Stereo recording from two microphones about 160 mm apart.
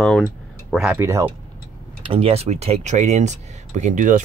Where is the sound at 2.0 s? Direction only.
35° right (ahead or behind); by 4.2 s 55° right (ahead or behind).